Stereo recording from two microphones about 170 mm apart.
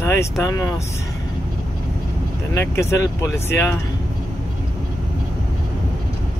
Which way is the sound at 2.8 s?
15° left (ahead or behind).